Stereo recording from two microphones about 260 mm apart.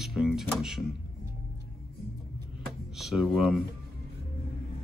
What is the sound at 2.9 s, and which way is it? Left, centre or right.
Speech, centre.